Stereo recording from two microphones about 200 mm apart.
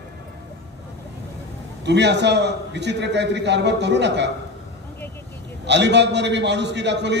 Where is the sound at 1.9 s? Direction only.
60° right (ahead or behind).